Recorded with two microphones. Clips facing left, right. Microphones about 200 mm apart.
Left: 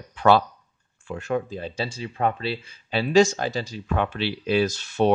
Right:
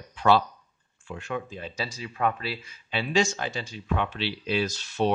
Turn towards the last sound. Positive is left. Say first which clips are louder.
# left 5 dB
turn(degrees=50)  # may be behind; listen again after turning